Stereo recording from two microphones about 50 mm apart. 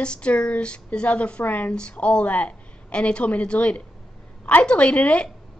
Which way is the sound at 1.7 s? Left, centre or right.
Left.